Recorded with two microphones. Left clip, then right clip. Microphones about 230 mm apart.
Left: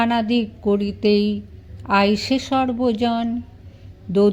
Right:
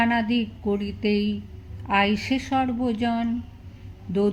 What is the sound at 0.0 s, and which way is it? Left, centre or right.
Speech, left.